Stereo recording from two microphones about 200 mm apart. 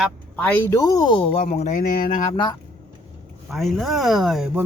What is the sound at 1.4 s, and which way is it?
Speech, 40° left (ahead or behind).